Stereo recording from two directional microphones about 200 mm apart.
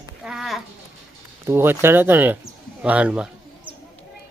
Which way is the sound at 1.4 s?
10° right (ahead or behind).